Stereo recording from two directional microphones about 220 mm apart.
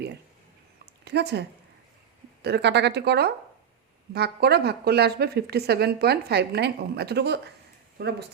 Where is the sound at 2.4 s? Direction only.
50° right (ahead or behind).